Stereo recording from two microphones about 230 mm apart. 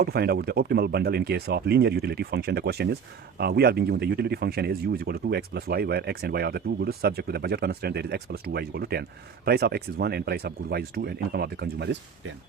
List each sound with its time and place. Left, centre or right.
0.0 s speech: right